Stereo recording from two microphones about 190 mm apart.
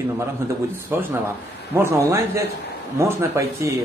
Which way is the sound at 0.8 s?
10° right (ahead or behind).